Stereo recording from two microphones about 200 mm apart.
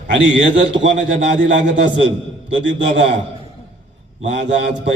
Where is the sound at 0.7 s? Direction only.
65° right (ahead or behind).